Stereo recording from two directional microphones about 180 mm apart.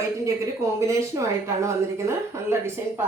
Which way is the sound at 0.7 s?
15° right (ahead or behind).